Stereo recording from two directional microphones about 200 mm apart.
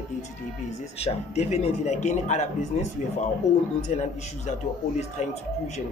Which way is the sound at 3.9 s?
35° left (ahead or behind).